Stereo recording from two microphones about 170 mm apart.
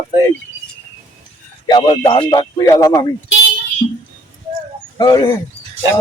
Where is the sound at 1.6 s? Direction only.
25° left (ahead or behind).